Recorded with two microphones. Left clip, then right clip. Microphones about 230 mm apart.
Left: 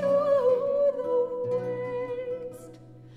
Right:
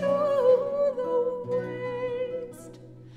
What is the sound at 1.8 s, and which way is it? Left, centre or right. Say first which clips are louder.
Music: right 1 dB; right.